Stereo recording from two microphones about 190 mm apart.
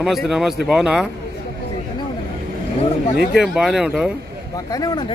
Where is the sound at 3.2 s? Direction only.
Centre (ahead or behind).